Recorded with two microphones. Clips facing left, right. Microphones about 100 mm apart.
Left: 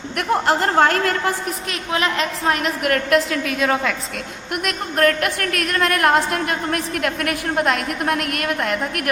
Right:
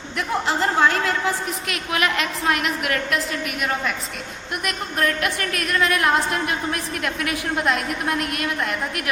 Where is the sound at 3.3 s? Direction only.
90° left.